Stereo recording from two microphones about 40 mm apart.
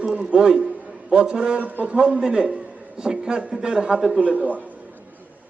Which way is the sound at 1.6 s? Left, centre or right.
Right.